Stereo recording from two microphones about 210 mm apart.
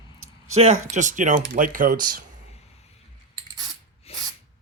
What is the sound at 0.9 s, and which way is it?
Speech, 35° right (ahead or behind).